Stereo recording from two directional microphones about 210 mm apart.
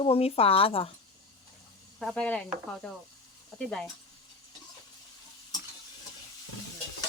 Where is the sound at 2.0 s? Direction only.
Centre (ahead or behind).